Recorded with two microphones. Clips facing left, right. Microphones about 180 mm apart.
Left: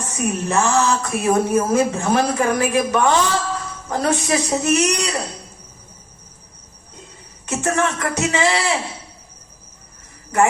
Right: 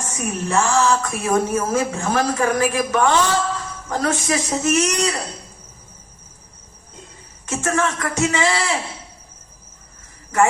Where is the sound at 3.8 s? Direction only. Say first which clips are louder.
Left 2 dB; 20° left (ahead or behind).